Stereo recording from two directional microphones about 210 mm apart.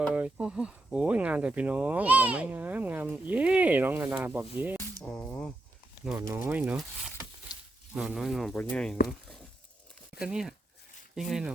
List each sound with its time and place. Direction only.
0.0 s speech: 5° right (ahead or behind)
5.0 s speech: 5° left (ahead or behind)
6.3 s speech: 10° right (ahead or behind)
7.5 s a sound: 20° left (ahead or behind)
7.9 s speech: centre (ahead or behind)
10.2 s speech: 5° right (ahead or behind)